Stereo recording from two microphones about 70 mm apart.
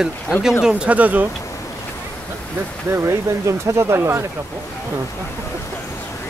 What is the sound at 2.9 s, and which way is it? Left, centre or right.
Speech, right.